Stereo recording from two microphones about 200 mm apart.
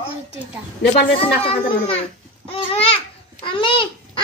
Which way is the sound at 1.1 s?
30° left (ahead or behind).